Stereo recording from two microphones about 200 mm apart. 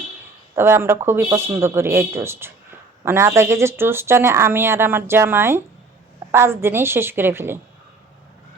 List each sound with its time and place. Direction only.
0.5 s speech: 10° right (ahead or behind)